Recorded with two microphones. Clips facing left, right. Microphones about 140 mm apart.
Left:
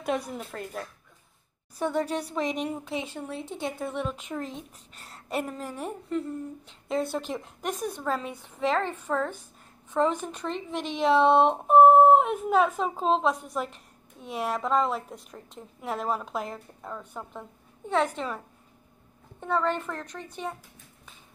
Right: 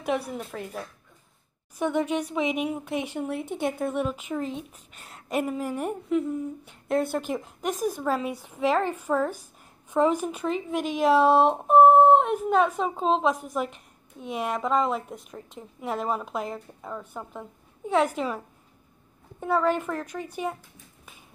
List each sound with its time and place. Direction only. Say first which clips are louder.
0.3 s a woman's voice: right 2 dB; centre (ahead or behind)
2.0 s a woman's voice: right 3 dB; 35° left (ahead or behind)
2.3 s a woman's voice: right 3 dB; 5° right (ahead or behind)
19.4 s speech: right 3 dB; 5° right (ahead or behind)